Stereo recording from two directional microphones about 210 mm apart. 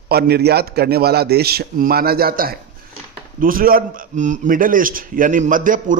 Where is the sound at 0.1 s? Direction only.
50° right (ahead or behind).